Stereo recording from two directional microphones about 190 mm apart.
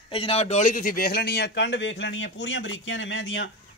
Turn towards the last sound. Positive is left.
turn(degrees=70)  # may be behind; listen again after turning